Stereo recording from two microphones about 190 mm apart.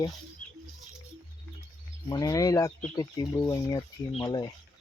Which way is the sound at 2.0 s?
20° left (ahead or behind).